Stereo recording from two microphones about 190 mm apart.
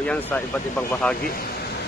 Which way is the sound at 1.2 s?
50° left (ahead or behind).